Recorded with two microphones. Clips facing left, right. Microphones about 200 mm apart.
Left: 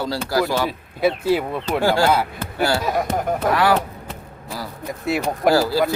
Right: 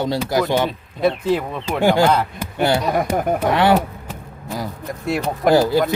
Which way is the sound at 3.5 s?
25° right (ahead or behind).